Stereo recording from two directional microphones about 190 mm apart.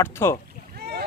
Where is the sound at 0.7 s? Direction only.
60° right (ahead or behind).